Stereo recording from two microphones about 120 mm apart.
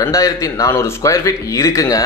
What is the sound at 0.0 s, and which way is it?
A man's voice, 25° left (ahead or behind).